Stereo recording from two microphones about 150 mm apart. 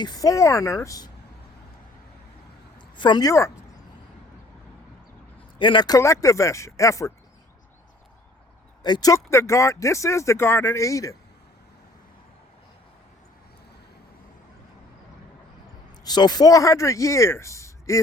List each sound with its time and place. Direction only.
0.0 s speech: 25° left (ahead or behind)
2.7 s speech: 30° left (ahead or behind)
5.5 s speech: 30° left (ahead or behind)
8.8 s speech: 25° left (ahead or behind)
16.0 s speech: 30° left (ahead or behind)